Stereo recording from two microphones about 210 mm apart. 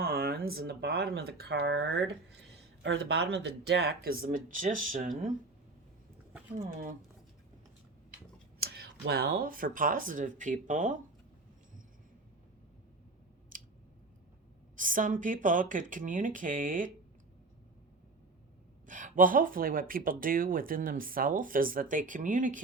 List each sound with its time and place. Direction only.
0.0 s speech: 45° right (ahead or behind)
6.7 s speech: 40° right (ahead or behind)
8.5 s speech: 50° right (ahead or behind)
13.5 s a sound: 40° right (ahead or behind)
14.8 s speech: 40° right (ahead or behind)
18.9 s speech: 40° right (ahead or behind)